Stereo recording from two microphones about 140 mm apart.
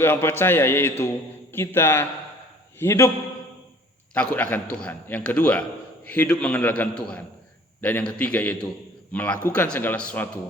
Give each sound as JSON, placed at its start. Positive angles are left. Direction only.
{"t": 0.0, "sound": "a man's voice", "side_deg": 15}
{"t": 4.1, "sound": "a man's voice", "side_deg": 10}